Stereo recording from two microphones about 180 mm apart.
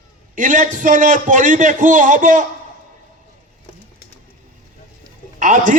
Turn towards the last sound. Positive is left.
turn(degrees=-45)  # may be behind; listen again after turning